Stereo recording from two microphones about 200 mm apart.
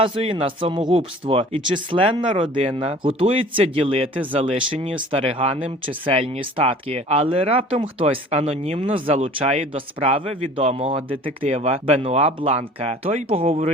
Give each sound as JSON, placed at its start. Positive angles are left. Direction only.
{"t": 0.0, "sound": "speech", "side_deg": -25}